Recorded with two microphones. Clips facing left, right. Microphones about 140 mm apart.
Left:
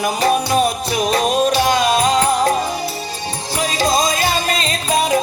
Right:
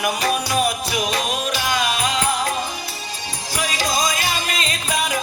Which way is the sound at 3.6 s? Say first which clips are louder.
Left 5 dB; 30° left (ahead or behind).